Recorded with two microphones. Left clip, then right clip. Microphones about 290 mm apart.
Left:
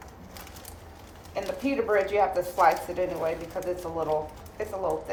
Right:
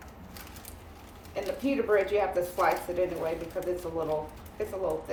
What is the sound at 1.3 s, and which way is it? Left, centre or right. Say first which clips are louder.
A woman's voice: left 2 dB; centre.